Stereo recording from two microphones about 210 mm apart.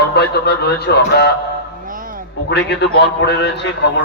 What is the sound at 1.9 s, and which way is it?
Bow-wow, 40° right (ahead or behind).